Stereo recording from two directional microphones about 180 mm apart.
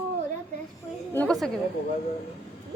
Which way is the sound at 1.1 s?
5° left (ahead or behind).